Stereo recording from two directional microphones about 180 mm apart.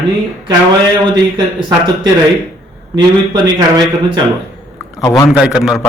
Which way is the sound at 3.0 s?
25° right (ahead or behind).